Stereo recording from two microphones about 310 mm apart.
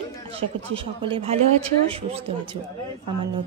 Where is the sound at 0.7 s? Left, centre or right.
Centre.